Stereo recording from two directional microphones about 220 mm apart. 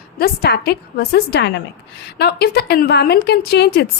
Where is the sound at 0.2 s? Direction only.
45° left (ahead or behind).